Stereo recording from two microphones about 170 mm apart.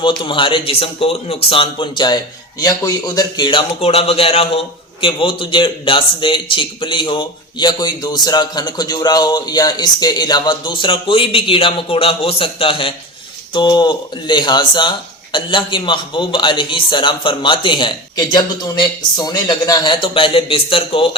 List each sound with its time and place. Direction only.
0.0 s speech: 25° left (ahead or behind)